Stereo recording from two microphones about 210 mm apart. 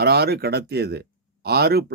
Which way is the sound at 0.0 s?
50° right (ahead or behind).